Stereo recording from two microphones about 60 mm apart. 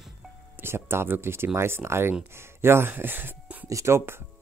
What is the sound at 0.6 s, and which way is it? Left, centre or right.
Speech, right.